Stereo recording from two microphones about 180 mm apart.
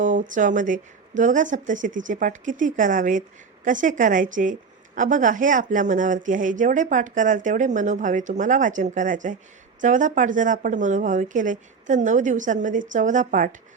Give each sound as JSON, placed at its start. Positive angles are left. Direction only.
{"t": 0.0, "sound": "speech", "side_deg": -45}